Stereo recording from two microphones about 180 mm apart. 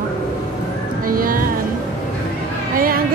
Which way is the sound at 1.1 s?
50° right (ahead or behind).